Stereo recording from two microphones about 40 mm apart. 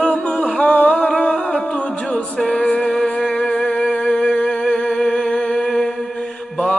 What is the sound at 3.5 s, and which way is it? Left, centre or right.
Music, left.